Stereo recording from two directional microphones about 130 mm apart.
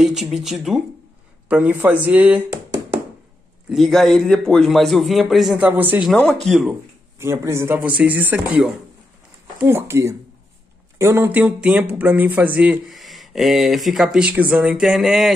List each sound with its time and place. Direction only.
0.0 s a man's voice: 5° right (ahead or behind)
3.6 s a man's voice: centre (ahead or behind)
6.1 s a man's voice: 5° left (ahead or behind)
6.7 s speech: 20° right (ahead or behind)
12.9 s a man's voice: centre (ahead or behind)